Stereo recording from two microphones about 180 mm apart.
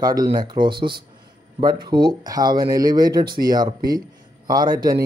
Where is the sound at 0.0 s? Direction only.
20° right (ahead or behind).